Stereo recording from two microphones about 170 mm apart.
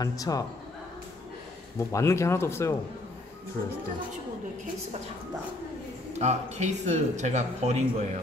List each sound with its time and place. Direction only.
0.0 s a man's voice: 20° left (ahead or behind)
1.8 s speech: 20° left (ahead or behind)
6.1 s speech: 40° right (ahead or behind)